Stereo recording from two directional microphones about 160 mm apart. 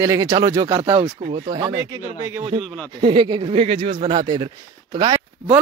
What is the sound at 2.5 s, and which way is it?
Speech, 35° right (ahead or behind).